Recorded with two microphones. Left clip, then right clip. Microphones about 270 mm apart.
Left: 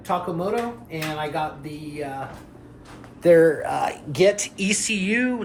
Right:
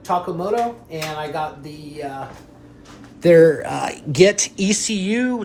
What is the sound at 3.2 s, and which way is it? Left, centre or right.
Speech, right.